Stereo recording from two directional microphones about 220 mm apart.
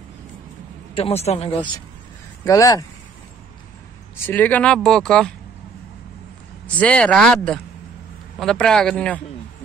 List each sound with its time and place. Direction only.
0.9 s speech: 25° left (ahead or behind)
2.4 s speech: 15° left (ahead or behind)
4.3 s speech: 5° left (ahead or behind)
6.8 s speech: 5° left (ahead or behind)